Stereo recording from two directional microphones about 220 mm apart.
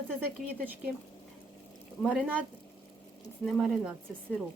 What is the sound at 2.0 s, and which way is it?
Speech, 5° right (ahead or behind).